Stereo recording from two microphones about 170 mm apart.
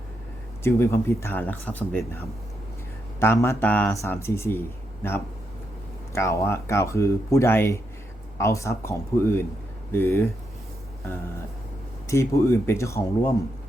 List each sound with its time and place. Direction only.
0.6 s speech: 15° left (ahead or behind)
6.1 s speech: 15° left (ahead or behind)
12.0 s speech: 15° left (ahead or behind)